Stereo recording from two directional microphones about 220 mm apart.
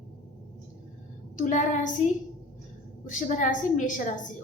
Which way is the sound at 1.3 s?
35° left (ahead or behind).